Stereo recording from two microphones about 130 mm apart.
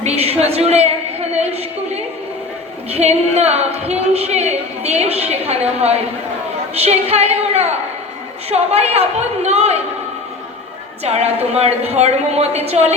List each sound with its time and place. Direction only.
0.0 s a woman's voice: 50° right (ahead or behind)
2.9 s a woman's voice: 55° right (ahead or behind)
11.0 s a woman's voice: 55° right (ahead or behind)